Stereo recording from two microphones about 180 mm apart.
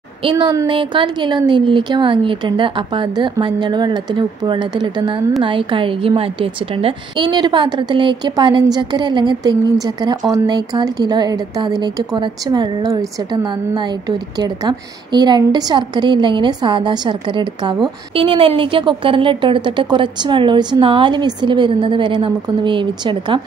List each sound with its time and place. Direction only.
0.2 s a woman's voice: 25° right (ahead or behind)